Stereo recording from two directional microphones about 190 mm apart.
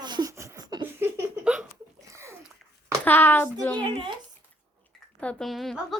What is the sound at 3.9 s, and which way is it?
Speech, 25° right (ahead or behind).